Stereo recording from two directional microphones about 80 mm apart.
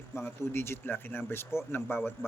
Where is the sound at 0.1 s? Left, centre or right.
Left.